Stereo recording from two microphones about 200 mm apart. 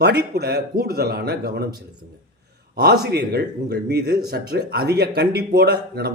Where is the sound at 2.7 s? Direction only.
50° right (ahead or behind).